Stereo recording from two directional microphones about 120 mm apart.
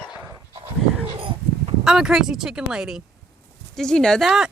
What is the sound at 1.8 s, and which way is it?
Speech, 5° right (ahead or behind).